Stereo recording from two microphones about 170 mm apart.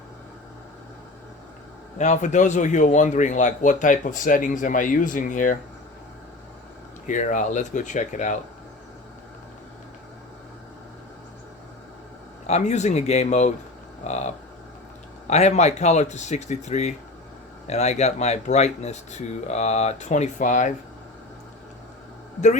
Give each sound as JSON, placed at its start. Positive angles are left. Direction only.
{"t": 2.0, "sound": "speech", "side_deg": 45}
{"t": 7.1, "sound": "speech", "side_deg": 50}
{"t": 12.5, "sound": "speech", "side_deg": 40}